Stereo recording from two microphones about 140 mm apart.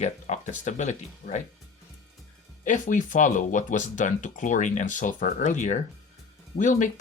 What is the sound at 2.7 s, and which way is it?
Speech, 65° left (ahead or behind).